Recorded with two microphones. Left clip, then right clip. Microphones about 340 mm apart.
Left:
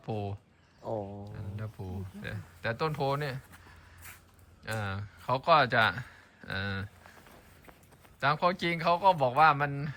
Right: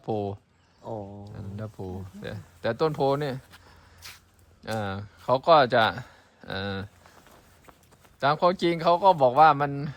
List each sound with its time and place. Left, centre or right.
0.0 s speech: centre
0.8 s speech: right
1.3 s speech: centre
8.2 s speech: centre